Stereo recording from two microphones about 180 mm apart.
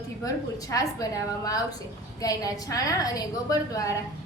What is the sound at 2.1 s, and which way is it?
A woman's voice, 20° left (ahead or behind).